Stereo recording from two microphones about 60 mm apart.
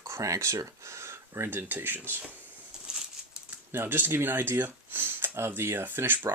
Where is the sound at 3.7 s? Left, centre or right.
Right.